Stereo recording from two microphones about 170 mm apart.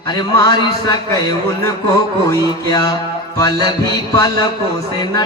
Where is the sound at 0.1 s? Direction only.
25° left (ahead or behind).